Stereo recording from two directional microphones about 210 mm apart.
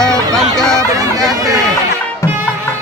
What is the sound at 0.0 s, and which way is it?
Music, 5° left (ahead or behind).